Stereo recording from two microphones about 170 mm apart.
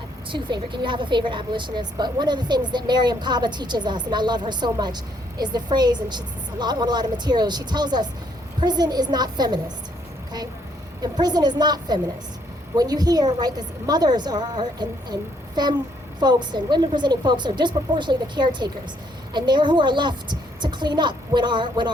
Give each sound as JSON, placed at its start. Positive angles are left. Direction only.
{"t": 0.3, "sound": "a woman's voice", "side_deg": -30}
{"t": 11.0, "sound": "a woman's voice", "side_deg": -25}